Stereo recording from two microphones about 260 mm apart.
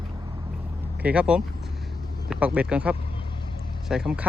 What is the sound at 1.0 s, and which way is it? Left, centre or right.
A man's voice, centre.